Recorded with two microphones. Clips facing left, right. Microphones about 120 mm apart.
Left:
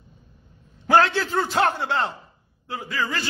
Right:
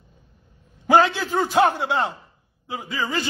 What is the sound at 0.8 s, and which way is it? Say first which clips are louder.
A man's voice: right 1 dB; 15° right (ahead or behind).